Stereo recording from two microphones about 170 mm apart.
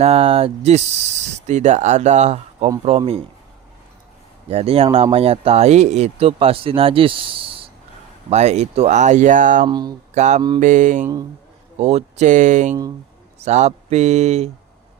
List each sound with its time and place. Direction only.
0.0 s speech: 35° right (ahead or behind)
4.4 s speech: 35° right (ahead or behind)
9.6 s speech: 25° right (ahead or behind)
10.2 s speech: 45° right (ahead or behind)